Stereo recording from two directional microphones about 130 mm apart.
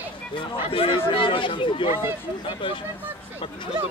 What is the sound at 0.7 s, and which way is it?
Speech, 45° left (ahead or behind).